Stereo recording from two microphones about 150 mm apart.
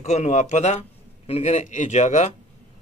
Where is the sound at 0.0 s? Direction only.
50° left (ahead or behind).